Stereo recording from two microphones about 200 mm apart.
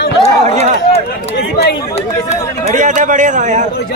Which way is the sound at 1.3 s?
55° left (ahead or behind).